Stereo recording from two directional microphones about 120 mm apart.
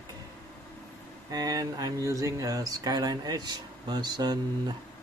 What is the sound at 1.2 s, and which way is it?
Speech, 30° right (ahead or behind).